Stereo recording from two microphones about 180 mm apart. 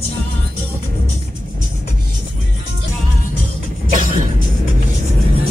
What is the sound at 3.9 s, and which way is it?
Music, 50° right (ahead or behind).